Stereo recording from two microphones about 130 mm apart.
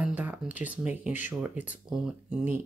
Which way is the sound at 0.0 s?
10° right (ahead or behind).